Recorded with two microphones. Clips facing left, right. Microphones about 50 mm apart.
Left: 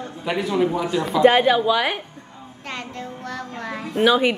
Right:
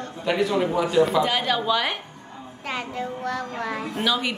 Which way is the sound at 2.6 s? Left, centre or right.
Centre.